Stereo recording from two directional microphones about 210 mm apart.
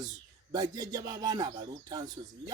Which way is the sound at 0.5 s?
20° right (ahead or behind).